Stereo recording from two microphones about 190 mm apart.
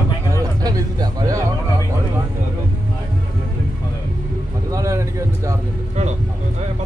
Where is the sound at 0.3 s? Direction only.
20° right (ahead or behind).